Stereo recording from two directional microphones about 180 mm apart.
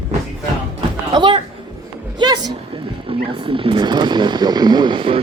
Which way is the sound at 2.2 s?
25° right (ahead or behind).